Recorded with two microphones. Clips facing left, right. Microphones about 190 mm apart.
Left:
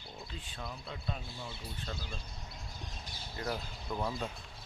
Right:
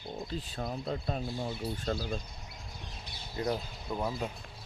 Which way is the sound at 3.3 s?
20° right (ahead or behind).